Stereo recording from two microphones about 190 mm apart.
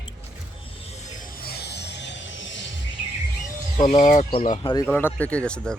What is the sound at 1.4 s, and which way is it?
Music, 55° left (ahead or behind).